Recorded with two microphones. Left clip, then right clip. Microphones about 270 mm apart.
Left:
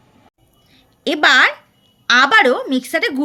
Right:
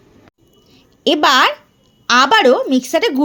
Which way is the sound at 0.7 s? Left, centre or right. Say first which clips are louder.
Right 5 dB; centre.